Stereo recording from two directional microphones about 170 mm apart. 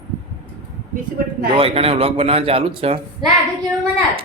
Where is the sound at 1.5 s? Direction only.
35° right (ahead or behind).